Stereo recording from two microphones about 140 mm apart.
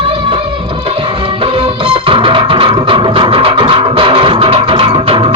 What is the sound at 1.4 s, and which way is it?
Music, 40° right (ahead or behind).